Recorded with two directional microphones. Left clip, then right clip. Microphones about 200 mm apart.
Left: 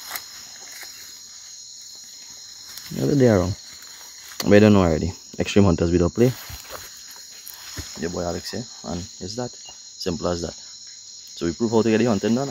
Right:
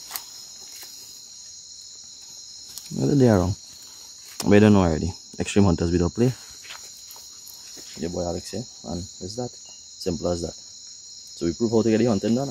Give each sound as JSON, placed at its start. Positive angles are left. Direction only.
{"t": 3.0, "sound": "speech", "side_deg": -25}
{"t": 4.4, "sound": "speech", "side_deg": -10}
{"t": 8.0, "sound": "speech", "side_deg": -5}
{"t": 8.9, "sound": "cricket", "side_deg": -5}
{"t": 10.2, "sound": "speech", "side_deg": -10}